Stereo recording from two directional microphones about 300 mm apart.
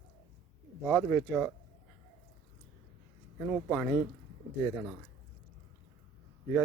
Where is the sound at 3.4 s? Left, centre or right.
Centre.